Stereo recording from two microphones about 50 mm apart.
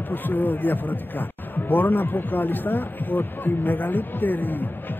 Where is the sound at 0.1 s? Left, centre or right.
Left.